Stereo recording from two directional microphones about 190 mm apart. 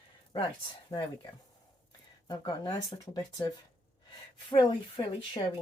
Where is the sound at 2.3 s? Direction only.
20° left (ahead or behind).